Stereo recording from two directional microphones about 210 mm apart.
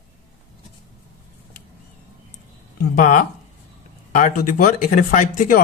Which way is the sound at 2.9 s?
40° left (ahead or behind).